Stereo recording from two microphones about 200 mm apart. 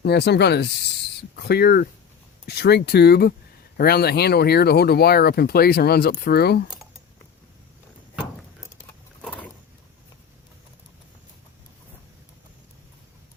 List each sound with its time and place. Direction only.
0.0 s speech: 55° left (ahead or behind)